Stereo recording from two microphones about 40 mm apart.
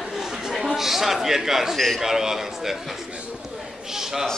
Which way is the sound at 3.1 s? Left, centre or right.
Right.